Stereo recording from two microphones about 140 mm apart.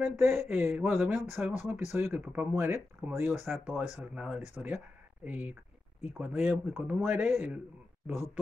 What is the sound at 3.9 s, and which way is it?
Speech, 5° right (ahead or behind).